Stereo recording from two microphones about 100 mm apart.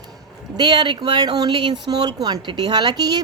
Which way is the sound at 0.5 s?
45° right (ahead or behind).